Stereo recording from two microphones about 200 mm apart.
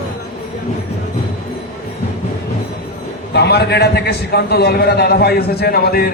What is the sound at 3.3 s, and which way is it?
A man's voice, 55° left (ahead or behind).